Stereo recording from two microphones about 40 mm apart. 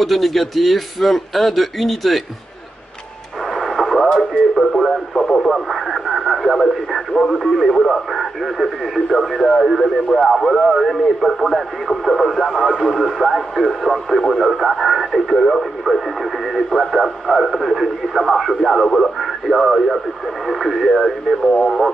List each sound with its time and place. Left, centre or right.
0.0 s speech: centre
3.5 s radio: centre
5.1 s speech: centre
5.7 s speech: centre
21.4 s speech: centre